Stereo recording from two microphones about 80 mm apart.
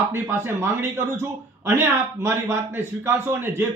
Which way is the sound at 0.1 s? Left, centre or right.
Right.